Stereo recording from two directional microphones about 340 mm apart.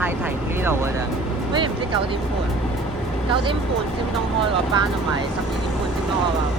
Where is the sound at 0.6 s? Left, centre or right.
Centre.